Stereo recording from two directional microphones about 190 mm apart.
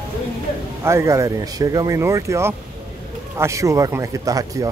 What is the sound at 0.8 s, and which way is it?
Speech, 15° right (ahead or behind).